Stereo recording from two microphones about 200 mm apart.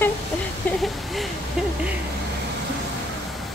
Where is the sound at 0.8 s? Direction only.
Centre (ahead or behind).